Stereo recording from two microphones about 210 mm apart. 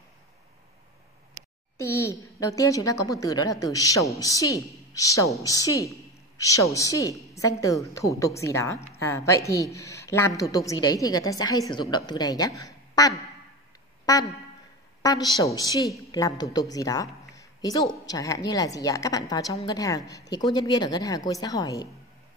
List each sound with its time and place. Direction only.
1.8 s a woman's voice: 15° left (ahead or behind)
15.0 s a woman's voice: 20° left (ahead or behind)